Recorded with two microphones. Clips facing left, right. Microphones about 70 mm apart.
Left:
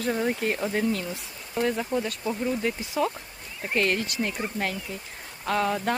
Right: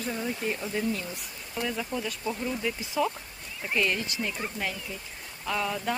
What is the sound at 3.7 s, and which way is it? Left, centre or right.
Speech, left.